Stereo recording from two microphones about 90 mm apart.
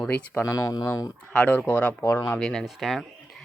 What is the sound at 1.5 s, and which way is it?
Speech, 20° left (ahead or behind).